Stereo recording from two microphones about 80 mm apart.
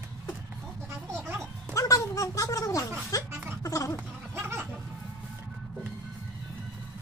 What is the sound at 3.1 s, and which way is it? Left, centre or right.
Music, left.